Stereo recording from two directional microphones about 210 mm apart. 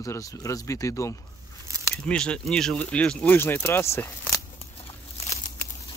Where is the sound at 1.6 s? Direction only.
15° right (ahead or behind).